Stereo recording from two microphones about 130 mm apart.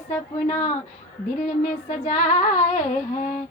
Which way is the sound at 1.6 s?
75° left (ahead or behind).